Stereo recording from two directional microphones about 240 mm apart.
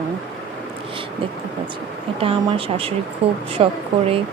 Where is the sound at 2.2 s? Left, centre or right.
Right.